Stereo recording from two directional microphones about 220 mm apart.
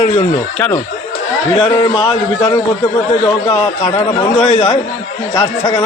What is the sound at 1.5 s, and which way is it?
A man's voice, 20° left (ahead or behind).